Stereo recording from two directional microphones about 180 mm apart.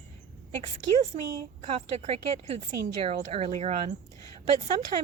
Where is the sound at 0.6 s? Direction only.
40° right (ahead or behind).